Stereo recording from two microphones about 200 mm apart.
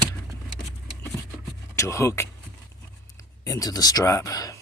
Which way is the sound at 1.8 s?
15° left (ahead or behind).